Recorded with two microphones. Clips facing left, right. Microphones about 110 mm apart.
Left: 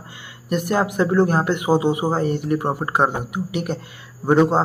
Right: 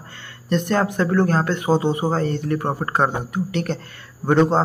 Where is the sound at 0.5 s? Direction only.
10° left (ahead or behind).